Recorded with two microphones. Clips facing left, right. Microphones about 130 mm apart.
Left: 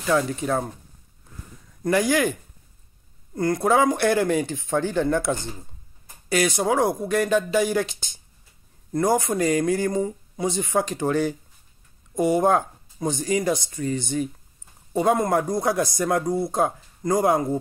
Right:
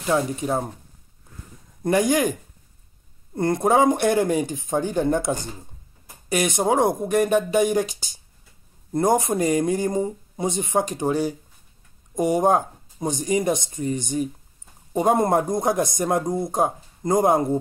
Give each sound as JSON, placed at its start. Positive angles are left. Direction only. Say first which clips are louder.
{"t": 0.0, "sound": "speech", "louder": "even", "side_deg": -25}
{"t": 1.8, "sound": "speech", "louder": "right 1 dB", "side_deg": -25}
{"t": 3.3, "sound": "speech", "louder": "right 1 dB", "side_deg": -25}